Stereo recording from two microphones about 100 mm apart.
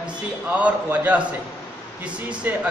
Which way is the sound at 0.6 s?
15° right (ahead or behind).